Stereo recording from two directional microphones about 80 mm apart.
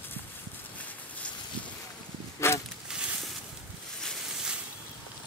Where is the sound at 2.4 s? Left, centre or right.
Left.